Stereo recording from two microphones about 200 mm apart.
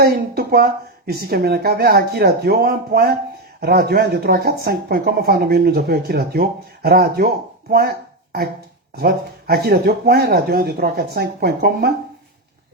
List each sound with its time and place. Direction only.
0.0 s speech: 50° right (ahead or behind)
7.7 s a sound: 50° right (ahead or behind)
9.0 s speech: 50° right (ahead or behind)